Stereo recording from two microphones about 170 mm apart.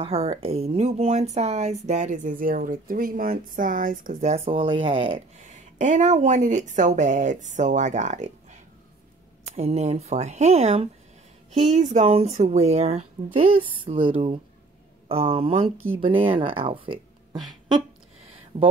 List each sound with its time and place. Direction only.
0.0 s speech: 35° right (ahead or behind)
5.4 s a woman's voice: 45° right (ahead or behind)
9.6 s speech: 40° right (ahead or behind)